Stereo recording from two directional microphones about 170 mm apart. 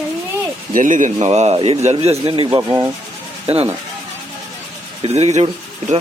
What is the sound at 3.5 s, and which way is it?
Speech, 35° right (ahead or behind).